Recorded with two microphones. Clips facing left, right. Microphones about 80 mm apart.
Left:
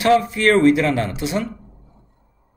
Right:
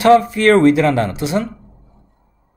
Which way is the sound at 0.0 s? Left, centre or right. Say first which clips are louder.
Right 5 dB; right.